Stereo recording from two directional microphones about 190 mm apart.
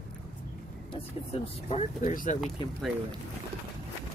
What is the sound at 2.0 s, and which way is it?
Speech, 45° left (ahead or behind).